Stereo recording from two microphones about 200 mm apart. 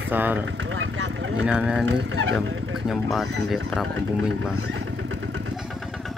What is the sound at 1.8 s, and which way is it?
Speech, 70° right (ahead or behind).